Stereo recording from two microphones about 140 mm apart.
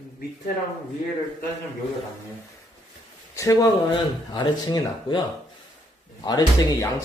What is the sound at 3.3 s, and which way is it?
Speech, 25° left (ahead or behind).